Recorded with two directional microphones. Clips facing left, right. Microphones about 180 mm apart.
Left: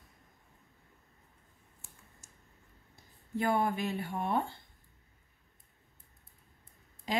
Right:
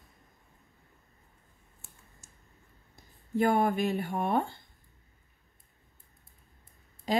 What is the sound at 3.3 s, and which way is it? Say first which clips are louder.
Speech: right 5 dB; 50° right (ahead or behind).